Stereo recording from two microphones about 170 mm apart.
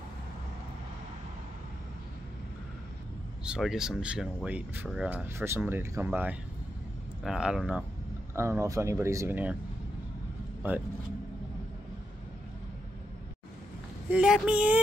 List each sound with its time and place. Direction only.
3.4 s speech: 5° right (ahead or behind)
8.4 s speech: 15° right (ahead or behind)
14.1 s speech: 5° right (ahead or behind)